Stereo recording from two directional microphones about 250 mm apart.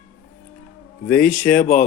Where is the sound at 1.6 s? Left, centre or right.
Left.